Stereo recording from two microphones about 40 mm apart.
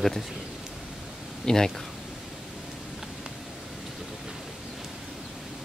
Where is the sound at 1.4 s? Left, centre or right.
Centre.